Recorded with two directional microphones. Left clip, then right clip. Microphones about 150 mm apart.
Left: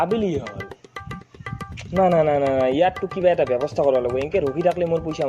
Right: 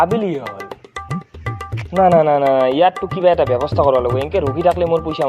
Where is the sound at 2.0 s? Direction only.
10° right (ahead or behind).